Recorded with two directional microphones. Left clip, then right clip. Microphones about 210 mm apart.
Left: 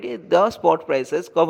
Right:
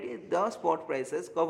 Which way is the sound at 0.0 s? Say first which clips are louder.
Left 12 dB; 35° left (ahead or behind).